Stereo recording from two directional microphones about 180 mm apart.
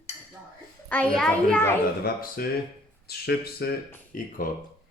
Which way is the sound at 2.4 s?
55° left (ahead or behind).